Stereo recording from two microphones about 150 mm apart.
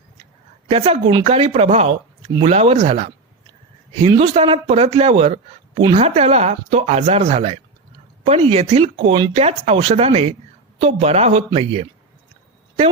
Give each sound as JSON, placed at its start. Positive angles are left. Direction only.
{"t": 0.7, "sound": "speech", "side_deg": -40}
{"t": 4.2, "sound": "speech", "side_deg": -40}